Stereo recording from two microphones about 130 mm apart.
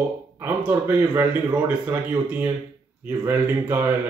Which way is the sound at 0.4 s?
15° right (ahead or behind).